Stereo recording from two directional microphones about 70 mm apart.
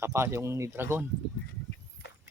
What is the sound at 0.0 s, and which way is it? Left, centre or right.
Speech, right.